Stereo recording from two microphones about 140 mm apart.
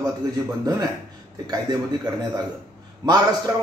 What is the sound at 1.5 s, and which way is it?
Speech, 30° right (ahead or behind).